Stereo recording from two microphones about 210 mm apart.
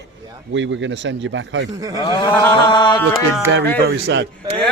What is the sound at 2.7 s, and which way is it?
Speech, 20° left (ahead or behind).